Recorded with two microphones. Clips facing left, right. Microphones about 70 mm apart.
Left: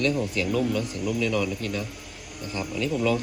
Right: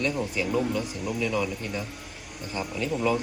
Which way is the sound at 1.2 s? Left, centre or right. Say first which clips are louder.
Even; centre.